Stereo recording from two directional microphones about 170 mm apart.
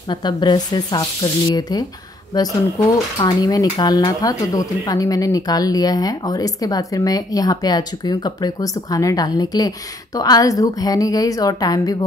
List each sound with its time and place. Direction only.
0.1 s dishes: 25° left (ahead or behind)